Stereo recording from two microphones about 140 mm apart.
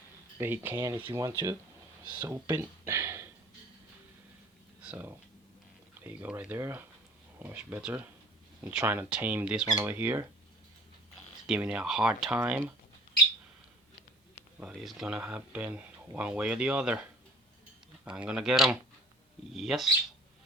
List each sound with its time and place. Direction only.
0.3 s speech: 15° right (ahead or behind)
4.8 s a sound: 10° right (ahead or behind)
6.0 s speech: 15° right (ahead or behind)
11.4 s speech: 5° right (ahead or behind)
14.6 s speech: 5° right (ahead or behind)
18.0 s speech: 10° right (ahead or behind)